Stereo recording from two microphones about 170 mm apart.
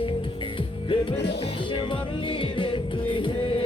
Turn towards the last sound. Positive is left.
turn(degrees=35)  # may be behind; listen again after turning